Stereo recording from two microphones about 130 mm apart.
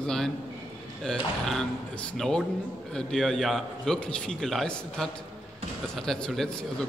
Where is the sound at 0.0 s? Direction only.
5° left (ahead or behind).